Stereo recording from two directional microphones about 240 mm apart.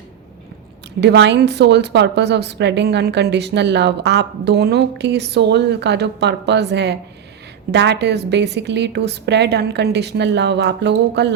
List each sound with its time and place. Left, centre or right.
1.0 s a woman's voice: right